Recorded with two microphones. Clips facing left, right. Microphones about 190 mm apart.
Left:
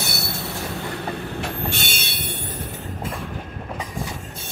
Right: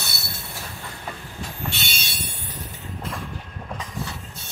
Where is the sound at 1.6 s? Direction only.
50° left (ahead or behind).